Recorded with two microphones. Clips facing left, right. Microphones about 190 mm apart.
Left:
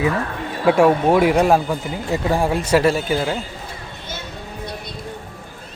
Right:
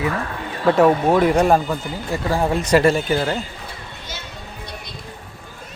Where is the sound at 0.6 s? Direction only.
10° left (ahead or behind).